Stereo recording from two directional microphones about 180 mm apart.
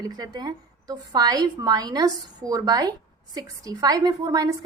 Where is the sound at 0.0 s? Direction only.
20° right (ahead or behind).